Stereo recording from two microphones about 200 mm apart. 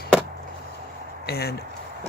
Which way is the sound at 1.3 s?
50° left (ahead or behind).